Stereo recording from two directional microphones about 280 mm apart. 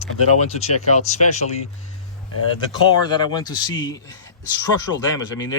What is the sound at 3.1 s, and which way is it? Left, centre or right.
Speech, centre.